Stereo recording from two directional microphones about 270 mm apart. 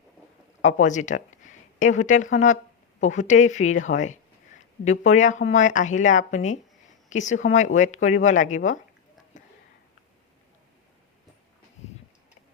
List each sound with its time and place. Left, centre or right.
0.6 s speech: left
11.8 s tick-tock: left